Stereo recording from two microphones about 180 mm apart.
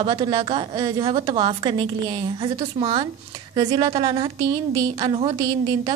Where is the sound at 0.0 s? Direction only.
25° right (ahead or behind).